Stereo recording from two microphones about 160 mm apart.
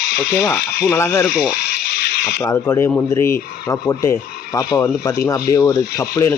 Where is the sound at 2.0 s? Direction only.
85° left.